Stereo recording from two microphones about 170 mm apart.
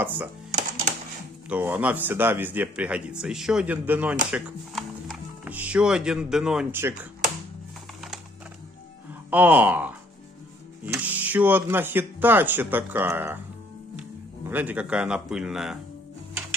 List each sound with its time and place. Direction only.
0.5 s music: 45° right (ahead or behind)
1.5 s speech: 10° right (ahead or behind)
9.3 s speech: 10° right (ahead or behind)
14.5 s speech: 10° right (ahead or behind)